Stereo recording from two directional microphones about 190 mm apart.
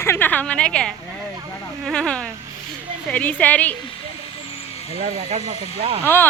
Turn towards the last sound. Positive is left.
turn(degrees=10)  # may be behind; listen again after turning